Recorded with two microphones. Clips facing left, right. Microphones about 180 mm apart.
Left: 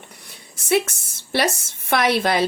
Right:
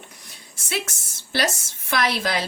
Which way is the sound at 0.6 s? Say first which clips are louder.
Left 10 dB; 60° left (ahead or behind).